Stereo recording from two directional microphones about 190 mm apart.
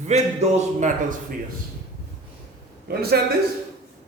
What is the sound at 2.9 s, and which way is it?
Speech, 55° right (ahead or behind).